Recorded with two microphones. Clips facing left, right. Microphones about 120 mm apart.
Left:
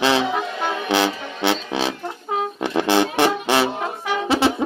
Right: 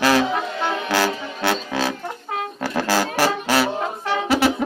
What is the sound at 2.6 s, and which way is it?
Brass instrument, 20° left (ahead or behind).